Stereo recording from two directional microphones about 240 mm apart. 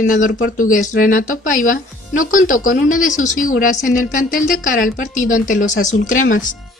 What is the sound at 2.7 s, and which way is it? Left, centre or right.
Speech, left.